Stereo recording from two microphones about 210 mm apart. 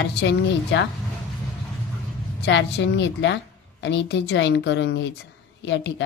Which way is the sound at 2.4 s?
55° left (ahead or behind).